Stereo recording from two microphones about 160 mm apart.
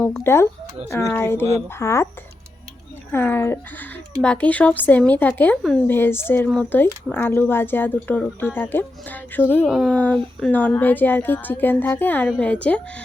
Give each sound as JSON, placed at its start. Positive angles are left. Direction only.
{"t": 0.0, "sound": "speech", "side_deg": 15}
{"t": 3.1, "sound": "speech", "side_deg": 15}
{"t": 9.6, "sound": "speech", "side_deg": 0}
{"t": 9.9, "sound": "speech", "side_deg": 10}